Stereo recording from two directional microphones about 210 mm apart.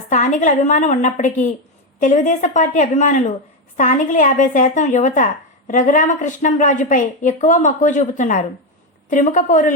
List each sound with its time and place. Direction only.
0.1 s speech: 35° left (ahead or behind)